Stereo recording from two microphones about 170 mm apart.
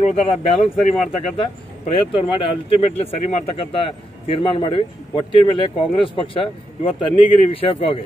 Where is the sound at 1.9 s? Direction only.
30° left (ahead or behind).